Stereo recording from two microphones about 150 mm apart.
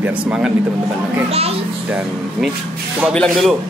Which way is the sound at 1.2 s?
40° right (ahead or behind).